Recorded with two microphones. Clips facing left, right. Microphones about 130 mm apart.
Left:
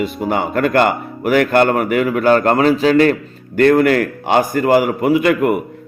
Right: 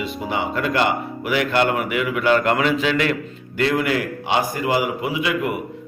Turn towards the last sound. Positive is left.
turn(degrees=50)  # may be behind; listen again after turning